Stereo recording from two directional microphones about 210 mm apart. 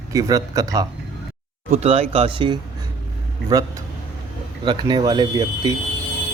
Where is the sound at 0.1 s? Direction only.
15° right (ahead or behind).